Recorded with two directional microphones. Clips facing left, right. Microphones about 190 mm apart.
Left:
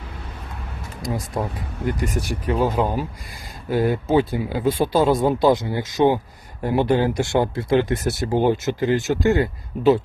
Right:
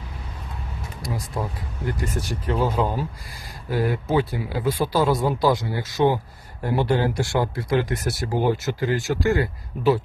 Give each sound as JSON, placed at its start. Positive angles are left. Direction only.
{"t": 1.9, "sound": "speech", "side_deg": 15}